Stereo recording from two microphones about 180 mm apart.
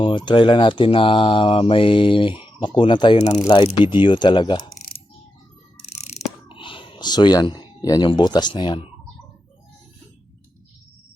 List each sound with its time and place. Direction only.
0.0 s speech: 25° left (ahead or behind)
3.2 s speech: 40° left (ahead or behind)
3.4 s speech: 25° left (ahead or behind)
6.0 s a sound: 40° left (ahead or behind)
6.5 s speech: 30° left (ahead or behind)